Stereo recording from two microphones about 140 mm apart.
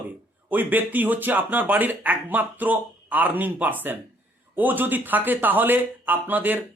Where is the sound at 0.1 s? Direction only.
10° right (ahead or behind).